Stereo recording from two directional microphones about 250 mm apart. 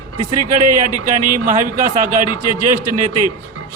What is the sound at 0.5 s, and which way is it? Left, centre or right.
A man's voice, right.